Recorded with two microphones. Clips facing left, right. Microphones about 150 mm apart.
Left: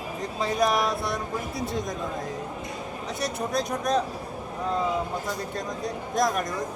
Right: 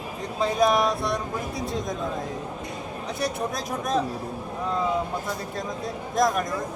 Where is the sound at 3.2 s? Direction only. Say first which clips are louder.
Left 1 dB; centre (ahead or behind).